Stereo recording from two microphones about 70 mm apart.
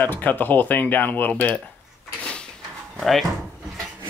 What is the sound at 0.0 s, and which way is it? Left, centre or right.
Speech, left.